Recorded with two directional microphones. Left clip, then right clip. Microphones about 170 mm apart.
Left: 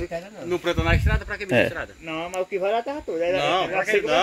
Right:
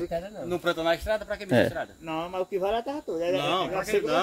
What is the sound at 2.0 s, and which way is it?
Speech, 25° right (ahead or behind).